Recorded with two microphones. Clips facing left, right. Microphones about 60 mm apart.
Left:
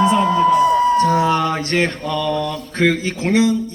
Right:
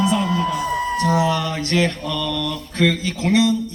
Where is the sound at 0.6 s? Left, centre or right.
Left.